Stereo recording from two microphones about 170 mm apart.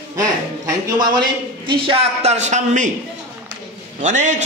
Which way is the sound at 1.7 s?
35° right (ahead or behind).